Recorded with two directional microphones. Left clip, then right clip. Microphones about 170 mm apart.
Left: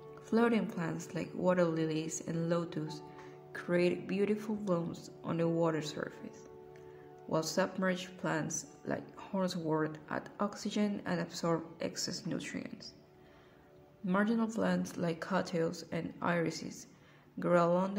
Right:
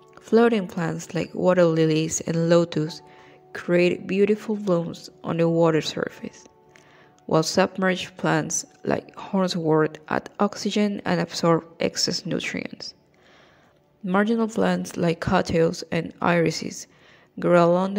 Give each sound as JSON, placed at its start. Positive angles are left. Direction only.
{"t": 0.1, "sound": "speech", "side_deg": -40}
{"t": 14.0, "sound": "speech", "side_deg": -40}